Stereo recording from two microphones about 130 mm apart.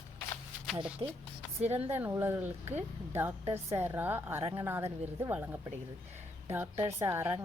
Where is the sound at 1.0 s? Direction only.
30° right (ahead or behind).